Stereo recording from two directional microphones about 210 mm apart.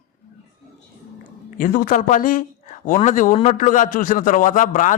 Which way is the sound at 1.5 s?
40° left (ahead or behind).